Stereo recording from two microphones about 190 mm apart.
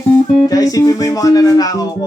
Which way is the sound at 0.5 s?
20° left (ahead or behind).